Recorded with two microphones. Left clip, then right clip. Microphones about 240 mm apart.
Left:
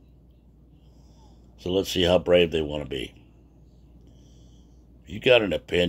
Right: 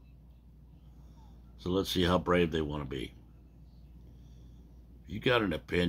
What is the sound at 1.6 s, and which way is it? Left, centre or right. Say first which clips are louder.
Speech: left 7 dB; right.